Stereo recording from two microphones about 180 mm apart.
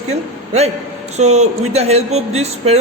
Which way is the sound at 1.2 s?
40° right (ahead or behind).